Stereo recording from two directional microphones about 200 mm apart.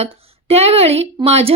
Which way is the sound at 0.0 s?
30° right (ahead or behind).